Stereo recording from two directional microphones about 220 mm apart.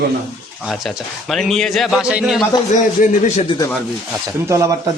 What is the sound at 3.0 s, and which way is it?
Speech, 35° left (ahead or behind).